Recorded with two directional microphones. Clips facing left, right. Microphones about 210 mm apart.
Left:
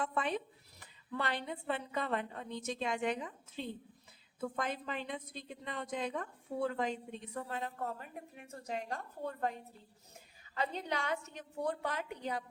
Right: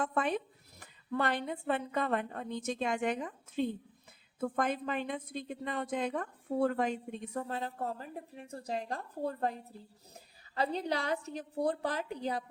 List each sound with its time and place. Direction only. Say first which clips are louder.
0.0 s a woman's voice: right 3 dB; 45° right (ahead or behind)